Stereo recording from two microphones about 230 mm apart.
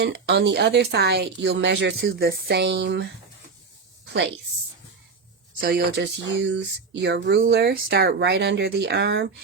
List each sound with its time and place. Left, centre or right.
0.0 s speech: right
5.5 s speech: right